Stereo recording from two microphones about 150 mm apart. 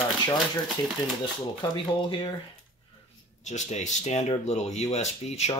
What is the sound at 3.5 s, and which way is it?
Speech, 50° left (ahead or behind).